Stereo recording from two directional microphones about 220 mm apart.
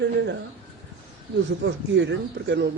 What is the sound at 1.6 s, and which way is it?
Speech, 55° right (ahead or behind).